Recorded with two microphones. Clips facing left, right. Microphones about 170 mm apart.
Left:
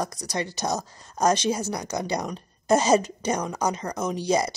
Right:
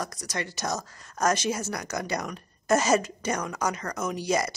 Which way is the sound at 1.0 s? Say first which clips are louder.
Left 3 dB; 35° left (ahead or behind).